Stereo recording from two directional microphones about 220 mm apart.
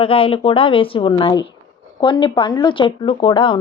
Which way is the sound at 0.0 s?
25° left (ahead or behind).